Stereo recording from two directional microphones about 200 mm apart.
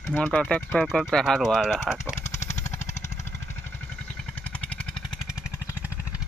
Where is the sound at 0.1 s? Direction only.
5° left (ahead or behind).